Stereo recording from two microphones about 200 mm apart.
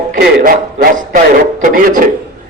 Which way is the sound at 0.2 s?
50° right (ahead or behind).